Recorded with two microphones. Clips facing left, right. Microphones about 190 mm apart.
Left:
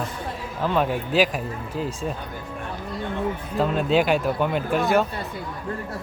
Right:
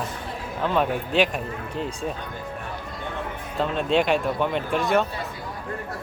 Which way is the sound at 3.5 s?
Centre (ahead or behind).